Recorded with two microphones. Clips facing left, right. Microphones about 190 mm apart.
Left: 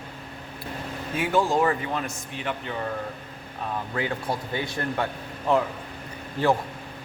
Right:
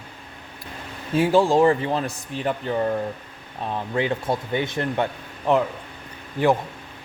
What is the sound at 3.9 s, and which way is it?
Speech, 25° right (ahead or behind).